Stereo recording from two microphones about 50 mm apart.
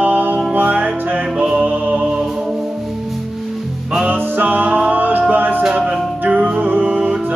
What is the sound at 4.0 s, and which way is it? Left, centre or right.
Music, right.